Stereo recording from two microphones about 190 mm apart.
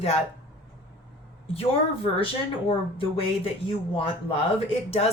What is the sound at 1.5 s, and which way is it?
A woman's voice, 30° left (ahead or behind).